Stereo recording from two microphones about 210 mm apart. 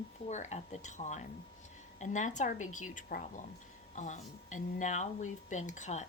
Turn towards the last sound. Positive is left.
turn(degrees=35)  # may be behind; listen again after turning